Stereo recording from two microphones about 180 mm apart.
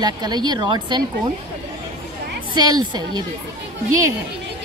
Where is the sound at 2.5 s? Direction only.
25° right (ahead or behind).